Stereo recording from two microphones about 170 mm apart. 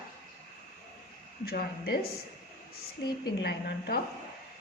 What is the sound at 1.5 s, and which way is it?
Speech, 65° left (ahead or behind).